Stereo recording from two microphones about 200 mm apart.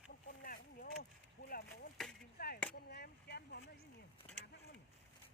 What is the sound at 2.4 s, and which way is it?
Chop, 50° left (ahead or behind).